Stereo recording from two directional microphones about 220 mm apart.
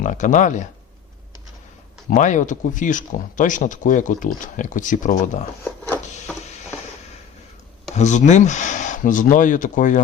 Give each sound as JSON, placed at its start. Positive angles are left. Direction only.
{"t": 0.0, "sound": "speech", "side_deg": 35}
{"t": 2.0, "sound": "speech", "side_deg": 35}
{"t": 5.9, "sound": "printer", "side_deg": 10}
{"t": 7.9, "sound": "speech", "side_deg": 30}